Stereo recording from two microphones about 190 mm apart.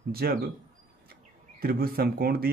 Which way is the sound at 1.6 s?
50° right (ahead or behind).